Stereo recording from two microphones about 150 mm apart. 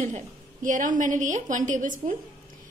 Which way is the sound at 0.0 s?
60° right (ahead or behind).